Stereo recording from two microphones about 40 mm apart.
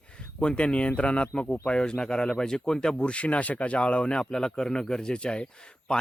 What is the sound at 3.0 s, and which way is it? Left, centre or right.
Speech, left.